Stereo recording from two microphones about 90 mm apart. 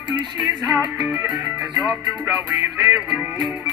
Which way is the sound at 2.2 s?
20° right (ahead or behind).